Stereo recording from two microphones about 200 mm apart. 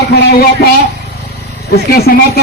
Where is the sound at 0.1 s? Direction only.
55° left (ahead or behind).